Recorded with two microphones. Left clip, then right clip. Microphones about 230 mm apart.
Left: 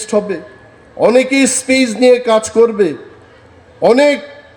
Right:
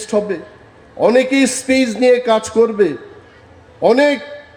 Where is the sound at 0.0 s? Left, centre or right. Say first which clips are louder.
Left 2 dB; left.